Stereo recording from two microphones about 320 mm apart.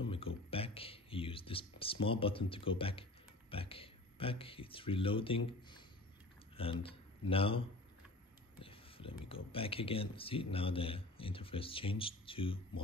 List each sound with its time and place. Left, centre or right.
0.5 s a sound: centre
6.5 s speech: centre
8.5 s whispering: centre
9.3 s a man's voice: centre